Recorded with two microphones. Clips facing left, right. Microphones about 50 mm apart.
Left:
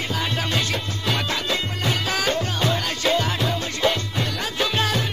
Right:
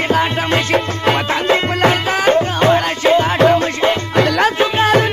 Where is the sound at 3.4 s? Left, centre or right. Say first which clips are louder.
Right 14 dB; right.